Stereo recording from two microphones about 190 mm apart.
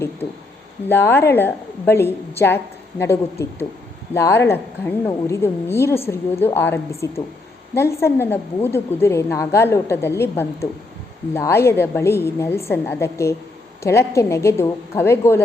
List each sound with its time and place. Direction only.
0.9 s a woman's voice: 10° left (ahead or behind)